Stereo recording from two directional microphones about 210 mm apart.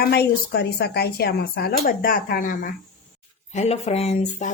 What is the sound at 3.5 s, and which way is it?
Speech, 30° left (ahead or behind).